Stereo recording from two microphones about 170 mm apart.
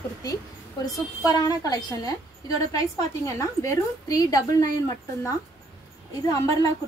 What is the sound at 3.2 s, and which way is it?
A woman's voice, 20° left (ahead or behind).